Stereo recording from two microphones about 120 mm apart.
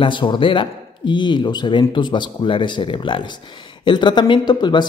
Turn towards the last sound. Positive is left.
turn(degrees=40)  # may be behind; listen again after turning